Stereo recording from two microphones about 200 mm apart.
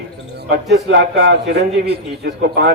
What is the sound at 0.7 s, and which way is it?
A man's voice, 60° right (ahead or behind).